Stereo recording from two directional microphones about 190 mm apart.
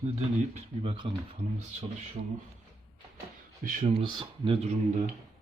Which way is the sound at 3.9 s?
25° right (ahead or behind).